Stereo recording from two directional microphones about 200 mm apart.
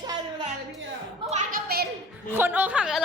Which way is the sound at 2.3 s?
10° right (ahead or behind).